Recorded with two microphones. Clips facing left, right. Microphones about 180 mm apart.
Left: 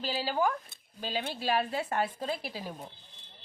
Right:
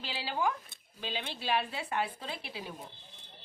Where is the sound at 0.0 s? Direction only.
40° left (ahead or behind).